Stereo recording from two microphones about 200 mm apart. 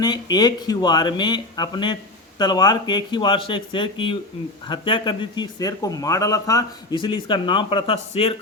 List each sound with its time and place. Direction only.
0.0 s a man's voice: 20° left (ahead or behind)